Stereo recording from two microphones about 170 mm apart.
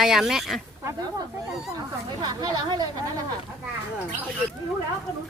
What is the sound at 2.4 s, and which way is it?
Speech, 25° right (ahead or behind).